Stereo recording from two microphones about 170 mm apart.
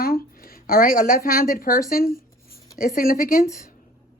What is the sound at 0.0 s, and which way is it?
A woman's voice, 60° left (ahead or behind).